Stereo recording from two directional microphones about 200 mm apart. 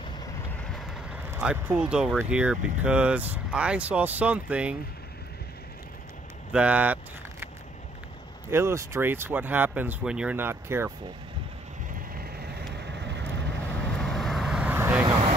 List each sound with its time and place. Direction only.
1.3 s speech: 10° right (ahead or behind)
6.5 s speech: 5° right (ahead or behind)
8.5 s speech: 10° right (ahead or behind)
13.0 s vehicle: 60° right (ahead or behind)
13.9 s vehicle: centre (ahead or behind)